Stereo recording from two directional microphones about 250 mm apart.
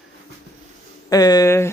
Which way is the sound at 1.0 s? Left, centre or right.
Centre.